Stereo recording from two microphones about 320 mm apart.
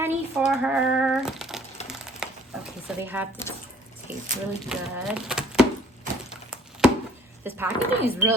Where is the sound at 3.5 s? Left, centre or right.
Centre.